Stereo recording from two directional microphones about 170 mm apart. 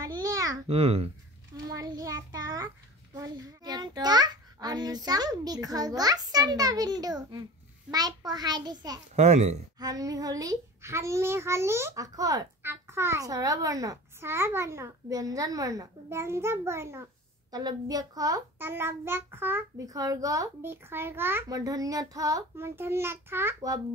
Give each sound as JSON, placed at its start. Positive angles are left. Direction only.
{"t": 0.0, "sound": "babbling", "side_deg": -20}
{"t": 0.7, "sound": "a child's voice", "side_deg": -35}
{"t": 1.7, "sound": "child singing", "side_deg": -20}
{"t": 3.2, "sound": "a child's voice", "side_deg": -25}
{"t": 9.1, "sound": "a child's voice", "side_deg": -40}
{"t": 9.8, "sound": "a child's voice", "side_deg": -20}